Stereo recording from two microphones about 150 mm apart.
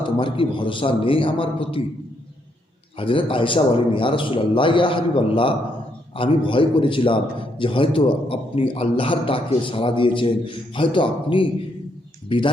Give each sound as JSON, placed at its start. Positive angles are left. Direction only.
{"t": 0.2, "sound": "a man's voice", "side_deg": 35}
{"t": 3.0, "sound": "a man's voice", "side_deg": 35}